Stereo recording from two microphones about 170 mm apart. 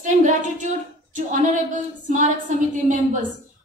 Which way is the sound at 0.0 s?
45° right (ahead or behind).